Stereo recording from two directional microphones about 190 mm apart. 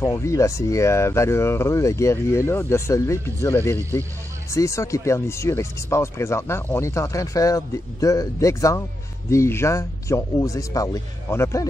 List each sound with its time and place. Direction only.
0.0 s speech: 15° left (ahead or behind)